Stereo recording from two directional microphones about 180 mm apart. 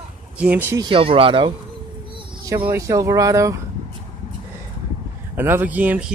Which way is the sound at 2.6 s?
15° right (ahead or behind).